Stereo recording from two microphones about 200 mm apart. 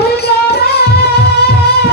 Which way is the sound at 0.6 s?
50° left (ahead or behind).